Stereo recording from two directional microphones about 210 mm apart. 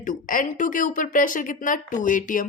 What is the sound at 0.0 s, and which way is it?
Speech, 40° left (ahead or behind).